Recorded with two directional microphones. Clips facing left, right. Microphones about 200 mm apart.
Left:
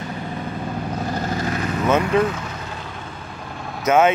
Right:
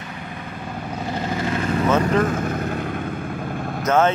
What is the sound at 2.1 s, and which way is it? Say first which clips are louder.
Vehicle: even; 50° right (ahead or behind).